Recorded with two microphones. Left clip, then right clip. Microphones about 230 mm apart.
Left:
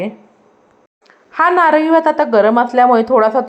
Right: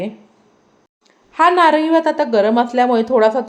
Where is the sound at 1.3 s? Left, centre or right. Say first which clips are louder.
Left 1 dB; centre.